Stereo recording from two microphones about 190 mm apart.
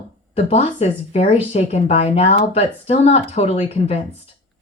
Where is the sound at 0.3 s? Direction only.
30° left (ahead or behind).